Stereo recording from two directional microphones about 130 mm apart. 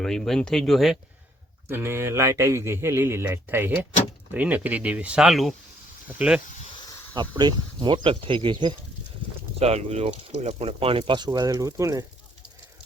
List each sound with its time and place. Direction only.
0.0 s speech: 5° left (ahead or behind)
1.6 s a man's voice: 20° right (ahead or behind)
7.1 s speech: 35° right (ahead or behind)
9.6 s speech: 55° right (ahead or behind)
11.3 s a man's voice: 30° right (ahead or behind)